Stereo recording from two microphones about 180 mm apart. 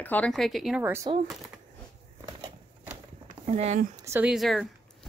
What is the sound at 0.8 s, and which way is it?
Speech, 10° right (ahead or behind).